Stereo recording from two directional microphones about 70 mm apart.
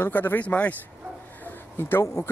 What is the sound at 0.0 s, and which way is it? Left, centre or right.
Speech, left.